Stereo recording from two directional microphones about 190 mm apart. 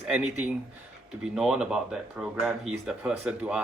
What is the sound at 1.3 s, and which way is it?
Speech, 5° right (ahead or behind).